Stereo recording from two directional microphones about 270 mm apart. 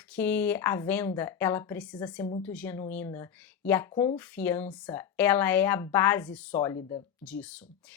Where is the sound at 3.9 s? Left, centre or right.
Centre.